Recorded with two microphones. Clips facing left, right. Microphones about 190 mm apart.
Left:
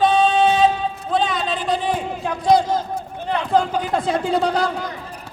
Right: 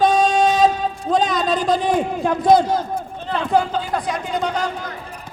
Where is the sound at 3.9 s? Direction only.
25° left (ahead or behind).